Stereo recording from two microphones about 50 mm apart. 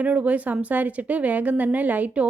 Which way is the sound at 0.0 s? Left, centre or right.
Right.